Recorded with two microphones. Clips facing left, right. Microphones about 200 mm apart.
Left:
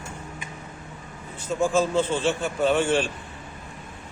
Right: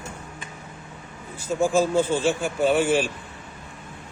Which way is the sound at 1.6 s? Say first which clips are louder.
Right 2 dB; 10° right (ahead or behind).